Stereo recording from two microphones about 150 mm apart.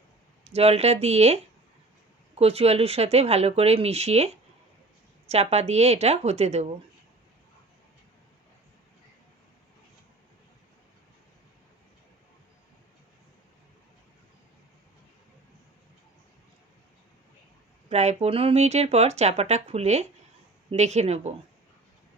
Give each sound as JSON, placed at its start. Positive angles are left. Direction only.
{"t": 0.4, "sound": "speech", "side_deg": -45}
{"t": 5.3, "sound": "speech", "side_deg": -45}
{"t": 17.8, "sound": "speech", "side_deg": -45}